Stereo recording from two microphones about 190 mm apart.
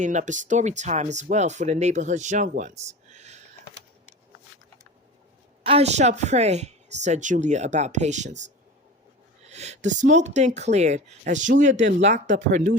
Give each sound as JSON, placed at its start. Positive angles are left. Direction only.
{"t": 0.0, "sound": "speech", "side_deg": -40}
{"t": 5.6, "sound": "speech", "side_deg": -35}
{"t": 9.5, "sound": "speech", "side_deg": -35}